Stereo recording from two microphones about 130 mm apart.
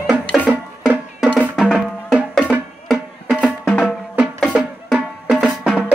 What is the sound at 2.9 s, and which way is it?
Music, 5° left (ahead or behind).